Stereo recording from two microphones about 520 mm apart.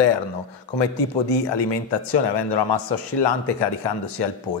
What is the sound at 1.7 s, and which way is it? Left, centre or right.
A man's voice, left.